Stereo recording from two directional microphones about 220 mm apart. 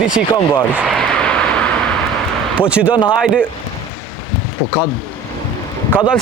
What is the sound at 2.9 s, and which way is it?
Speech, 20° left (ahead or behind).